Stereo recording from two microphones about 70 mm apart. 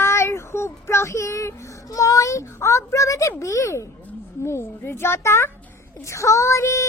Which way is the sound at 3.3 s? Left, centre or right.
Left.